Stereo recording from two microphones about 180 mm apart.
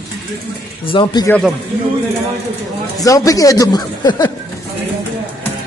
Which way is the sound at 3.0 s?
20° left (ahead or behind).